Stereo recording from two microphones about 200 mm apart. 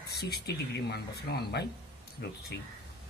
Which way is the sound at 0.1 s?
50° left (ahead or behind).